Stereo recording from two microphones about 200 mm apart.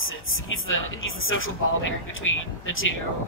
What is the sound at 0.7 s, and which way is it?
Speech, 85° left.